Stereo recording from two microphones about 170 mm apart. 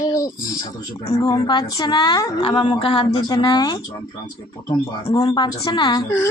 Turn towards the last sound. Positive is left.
turn(degrees=20)  # may be behind; listen again after turning